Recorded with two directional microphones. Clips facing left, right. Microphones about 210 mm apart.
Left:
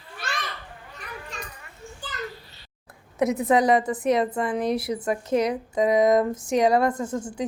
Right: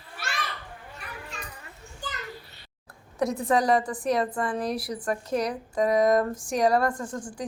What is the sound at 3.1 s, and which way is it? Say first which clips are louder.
A woman's voice: left 4 dB; 20° left (ahead or behind).